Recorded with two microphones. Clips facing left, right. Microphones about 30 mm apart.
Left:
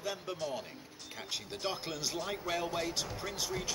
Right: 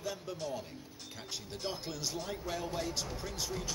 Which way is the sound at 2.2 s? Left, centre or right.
Left.